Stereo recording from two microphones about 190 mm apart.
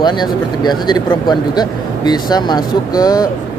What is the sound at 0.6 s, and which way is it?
Speech, 20° left (ahead or behind).